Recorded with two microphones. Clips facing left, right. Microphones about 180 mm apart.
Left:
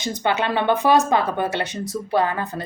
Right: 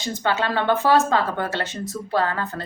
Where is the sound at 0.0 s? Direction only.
20° left (ahead or behind).